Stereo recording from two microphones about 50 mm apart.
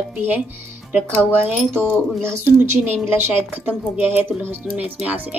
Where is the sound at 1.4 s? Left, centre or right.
Right.